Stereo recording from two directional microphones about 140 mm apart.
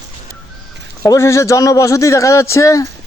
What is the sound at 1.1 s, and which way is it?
A man's voice, 20° left (ahead or behind).